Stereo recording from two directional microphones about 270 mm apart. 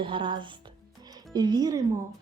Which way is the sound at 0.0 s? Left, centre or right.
Centre.